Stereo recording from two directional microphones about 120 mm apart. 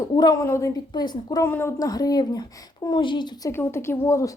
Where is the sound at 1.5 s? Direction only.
15° left (ahead or behind).